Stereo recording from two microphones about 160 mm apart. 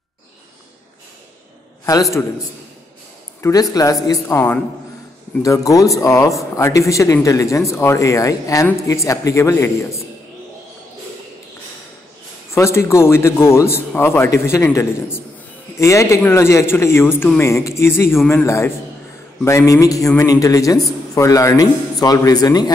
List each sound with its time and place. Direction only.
1.9 s speech: 20° left (ahead or behind)
3.3 s speech: 15° left (ahead or behind)
12.5 s a man's voice: 15° left (ahead or behind)